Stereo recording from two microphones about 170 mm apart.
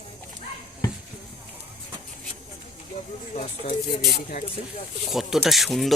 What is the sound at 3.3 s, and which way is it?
Speech, 45° left (ahead or behind).